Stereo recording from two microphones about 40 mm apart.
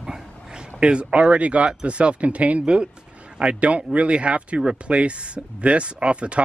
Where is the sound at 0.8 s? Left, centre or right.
Right.